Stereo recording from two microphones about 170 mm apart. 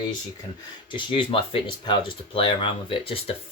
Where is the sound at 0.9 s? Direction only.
30° left (ahead or behind).